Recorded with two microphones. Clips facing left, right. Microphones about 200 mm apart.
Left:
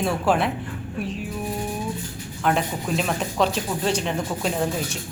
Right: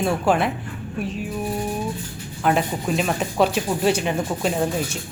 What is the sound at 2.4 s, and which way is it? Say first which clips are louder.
A woman's voice: right 2 dB; 5° right (ahead or behind).